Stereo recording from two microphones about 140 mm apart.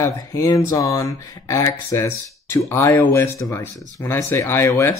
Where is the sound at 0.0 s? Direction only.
20° left (ahead or behind).